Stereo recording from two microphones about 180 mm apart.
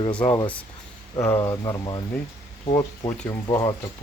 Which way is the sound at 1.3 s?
20° left (ahead or behind).